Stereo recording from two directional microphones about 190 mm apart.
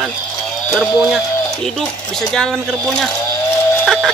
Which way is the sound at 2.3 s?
Centre (ahead or behind).